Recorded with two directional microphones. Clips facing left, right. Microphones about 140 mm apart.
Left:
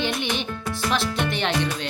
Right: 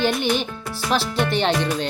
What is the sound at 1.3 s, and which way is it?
Speech, 30° right (ahead or behind).